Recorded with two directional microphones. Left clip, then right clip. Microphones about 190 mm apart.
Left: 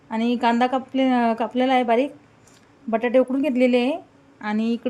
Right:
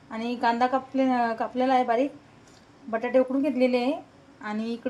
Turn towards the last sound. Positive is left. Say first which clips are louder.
# left 7 dB
turn(degrees=40)  # may be behind; listen again after turning